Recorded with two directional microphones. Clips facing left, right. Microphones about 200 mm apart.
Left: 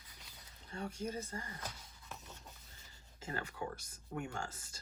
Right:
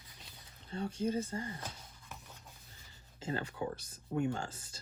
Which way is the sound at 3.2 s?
25° right (ahead or behind).